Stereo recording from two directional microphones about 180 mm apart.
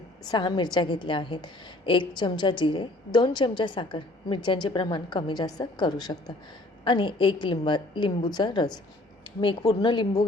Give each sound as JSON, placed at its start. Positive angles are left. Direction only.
{"t": 0.3, "sound": "a woman's voice", "side_deg": 25}